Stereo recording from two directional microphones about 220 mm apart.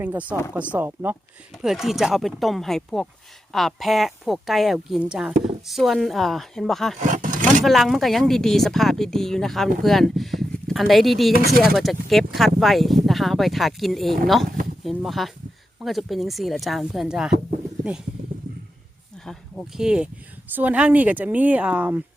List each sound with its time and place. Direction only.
0.0 s a woman's voice: 5° right (ahead or behind)
7.0 s roar: 35° right (ahead or behind)
7.6 s a woman's voice: centre (ahead or behind)
11.3 s speech: 40° right (ahead or behind)
11.8 s a woman's voice: centre (ahead or behind)
19.2 s speech: centre (ahead or behind)